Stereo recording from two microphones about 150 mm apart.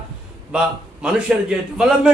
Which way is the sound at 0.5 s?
5° right (ahead or behind).